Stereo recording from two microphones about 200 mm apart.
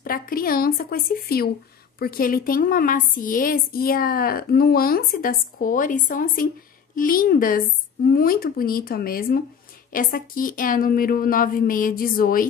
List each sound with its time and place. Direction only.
0.0 s a woman's voice: 45° left (ahead or behind)